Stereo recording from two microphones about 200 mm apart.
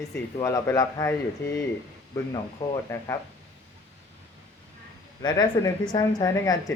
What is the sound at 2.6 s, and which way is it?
Speech, 15° left (ahead or behind).